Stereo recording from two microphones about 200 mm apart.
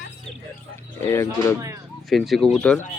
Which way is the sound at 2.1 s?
Centre (ahead or behind).